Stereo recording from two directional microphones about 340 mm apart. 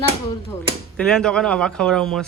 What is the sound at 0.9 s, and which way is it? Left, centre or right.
Speech, centre.